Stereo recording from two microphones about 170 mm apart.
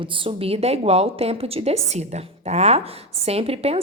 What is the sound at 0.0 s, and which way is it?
A woman's voice, 30° right (ahead or behind).